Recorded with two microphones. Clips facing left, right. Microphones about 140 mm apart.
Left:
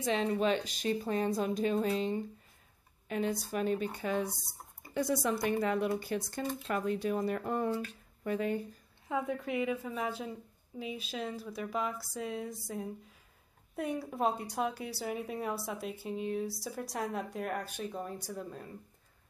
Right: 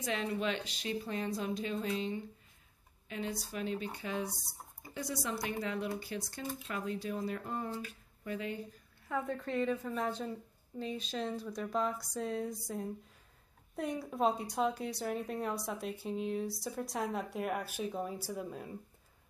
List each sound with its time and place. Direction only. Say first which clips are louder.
0.0 s a woman's voice: left 5 dB; 30° left (ahead or behind)
3.1 s a woman's voice: left 6 dB; 50° left (ahead or behind); by 8.3 s 65° left (ahead or behind)
8.3 s a woman's voice: left 6 dB; 50° left (ahead or behind)
9.1 s a woman's voice: left 2 dB; 10° left (ahead or behind); by 18.7 s 5° right (ahead or behind)